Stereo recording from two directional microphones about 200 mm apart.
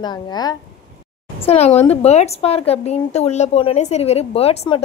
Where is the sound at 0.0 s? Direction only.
20° left (ahead or behind).